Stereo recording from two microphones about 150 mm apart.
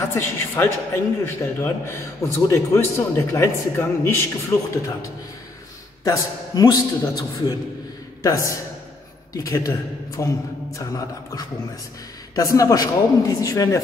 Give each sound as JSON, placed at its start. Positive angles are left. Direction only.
{"t": 0.0, "sound": "a man's voice", "side_deg": 15}